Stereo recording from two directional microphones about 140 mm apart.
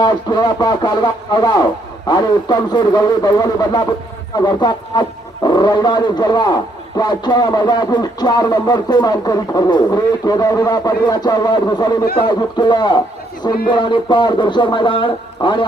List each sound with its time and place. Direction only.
0.0 s a man's voice: 30° left (ahead or behind)